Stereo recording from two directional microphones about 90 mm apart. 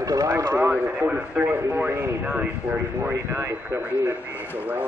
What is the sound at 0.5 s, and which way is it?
A man's voice, 20° right (ahead or behind).